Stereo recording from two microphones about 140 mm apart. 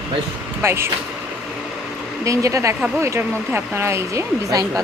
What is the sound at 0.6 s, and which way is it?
Speech, 15° right (ahead or behind).